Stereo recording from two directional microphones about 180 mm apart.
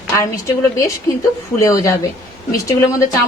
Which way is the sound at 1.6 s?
15° left (ahead or behind).